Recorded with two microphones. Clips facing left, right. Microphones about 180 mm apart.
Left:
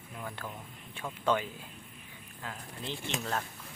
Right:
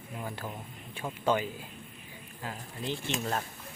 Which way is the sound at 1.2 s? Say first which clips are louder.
Right 1 dB; 10° right (ahead or behind).